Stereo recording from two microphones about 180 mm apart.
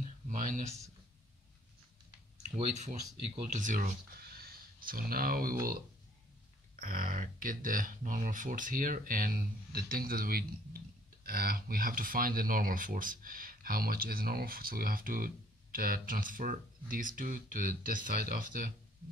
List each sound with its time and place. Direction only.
0.3 s a sound: 45° right (ahead or behind)
2.5 s speech: 40° right (ahead or behind)
6.8 s speech: 50° right (ahead or behind)